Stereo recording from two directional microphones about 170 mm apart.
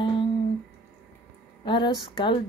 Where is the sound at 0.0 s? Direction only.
30° left (ahead or behind).